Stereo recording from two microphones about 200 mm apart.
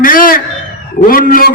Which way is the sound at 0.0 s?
45° left (ahead or behind).